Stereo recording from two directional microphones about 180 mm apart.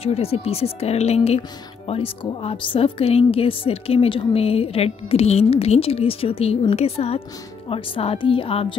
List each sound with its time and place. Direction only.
0.0 s speech: 35° left (ahead or behind)